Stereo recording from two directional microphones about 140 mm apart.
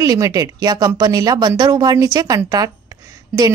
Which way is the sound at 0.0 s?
25° right (ahead or behind).